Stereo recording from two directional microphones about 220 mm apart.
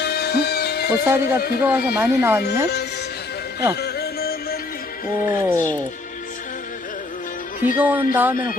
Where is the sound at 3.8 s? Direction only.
45° left (ahead or behind).